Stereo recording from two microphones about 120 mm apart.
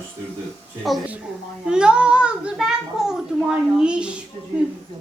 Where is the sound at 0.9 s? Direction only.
Centre (ahead or behind).